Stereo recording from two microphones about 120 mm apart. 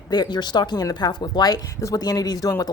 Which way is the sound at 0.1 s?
35° left (ahead or behind).